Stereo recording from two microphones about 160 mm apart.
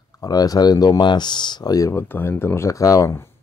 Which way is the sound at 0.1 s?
25° left (ahead or behind).